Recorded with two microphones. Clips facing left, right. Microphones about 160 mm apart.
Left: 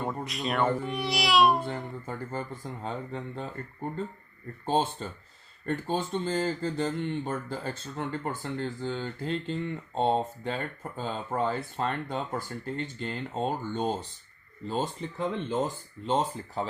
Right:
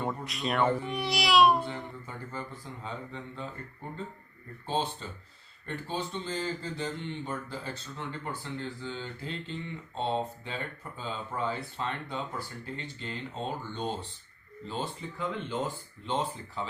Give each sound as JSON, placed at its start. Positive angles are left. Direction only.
{"t": 0.3, "sound": "speech", "side_deg": 0}
{"t": 2.0, "sound": "speech", "side_deg": 45}
{"t": 4.6, "sound": "speech", "side_deg": 45}